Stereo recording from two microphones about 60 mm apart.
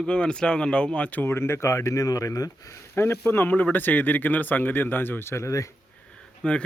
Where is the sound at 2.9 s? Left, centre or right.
Left.